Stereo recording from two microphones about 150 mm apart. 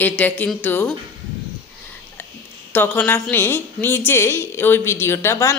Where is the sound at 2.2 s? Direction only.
10° left (ahead or behind).